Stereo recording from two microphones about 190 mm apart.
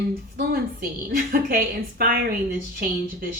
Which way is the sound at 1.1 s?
50° right (ahead or behind).